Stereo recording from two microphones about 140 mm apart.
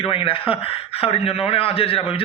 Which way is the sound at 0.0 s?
40° left (ahead or behind).